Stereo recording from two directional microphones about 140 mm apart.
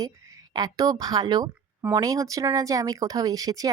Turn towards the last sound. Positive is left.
turn(degrees=-25)  # may be behind; listen again after turning